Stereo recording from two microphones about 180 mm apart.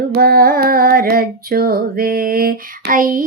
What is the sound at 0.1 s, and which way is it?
Carnatic music, 55° right (ahead or behind).